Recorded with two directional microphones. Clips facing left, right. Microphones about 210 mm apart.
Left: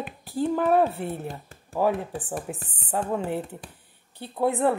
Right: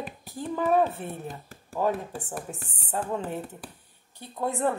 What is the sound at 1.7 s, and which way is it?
Speech, 15° left (ahead or behind).